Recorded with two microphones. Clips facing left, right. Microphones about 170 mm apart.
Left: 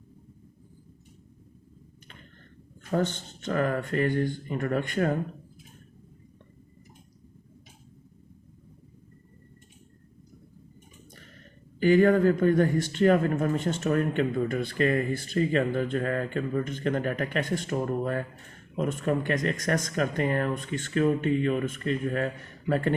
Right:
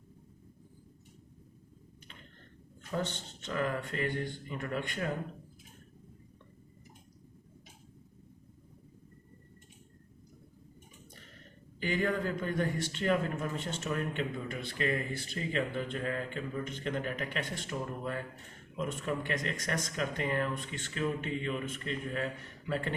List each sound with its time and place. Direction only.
2.9 s speech: 45° left (ahead or behind)
11.8 s speech: 45° left (ahead or behind)